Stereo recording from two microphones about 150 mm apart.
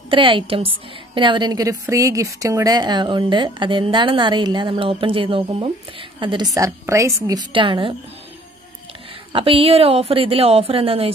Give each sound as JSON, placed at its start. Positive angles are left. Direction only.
{"t": 0.1, "sound": "a woman's voice", "side_deg": -35}
{"t": 9.3, "sound": "a woman's voice", "side_deg": -40}